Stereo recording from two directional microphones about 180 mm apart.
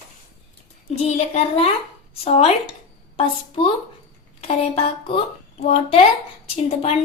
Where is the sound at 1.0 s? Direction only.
35° left (ahead or behind).